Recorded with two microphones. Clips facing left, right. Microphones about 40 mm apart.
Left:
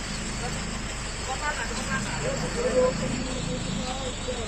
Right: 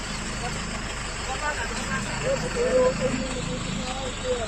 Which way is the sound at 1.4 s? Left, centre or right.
Right.